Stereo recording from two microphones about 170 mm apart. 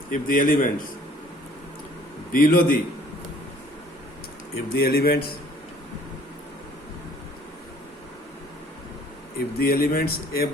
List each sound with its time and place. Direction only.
0.1 s a man's voice: 55° left (ahead or behind)
2.3 s speech: 55° left (ahead or behind)
4.7 s speech: 65° left (ahead or behind)
9.4 s speech: 65° left (ahead or behind)